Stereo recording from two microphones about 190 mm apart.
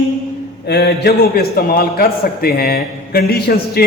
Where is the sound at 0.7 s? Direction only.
55° left (ahead or behind).